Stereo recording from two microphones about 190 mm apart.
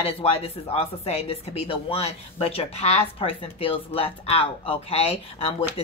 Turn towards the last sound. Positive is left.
turn(degrees=30)  # may be behind; listen again after turning